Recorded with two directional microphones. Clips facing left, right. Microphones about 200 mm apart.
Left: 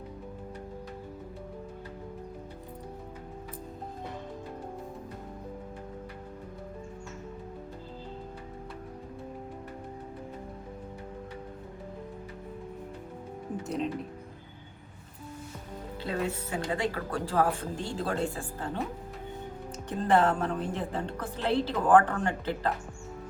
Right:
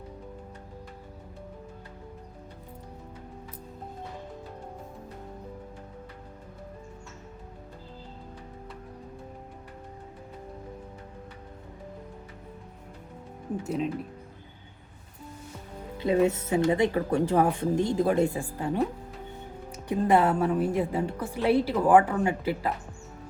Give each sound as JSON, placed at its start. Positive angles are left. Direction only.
{"t": 13.7, "sound": "speech", "side_deg": -5}
{"t": 16.0, "sound": "speech", "side_deg": -20}
{"t": 19.9, "sound": "a woman's voice", "side_deg": -10}